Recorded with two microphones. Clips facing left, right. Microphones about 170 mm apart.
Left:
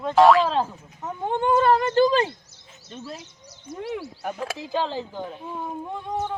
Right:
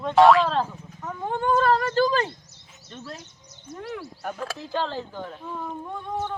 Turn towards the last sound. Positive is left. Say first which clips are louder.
# left 2 dB
turn(degrees=15)  # may be behind; listen again after turning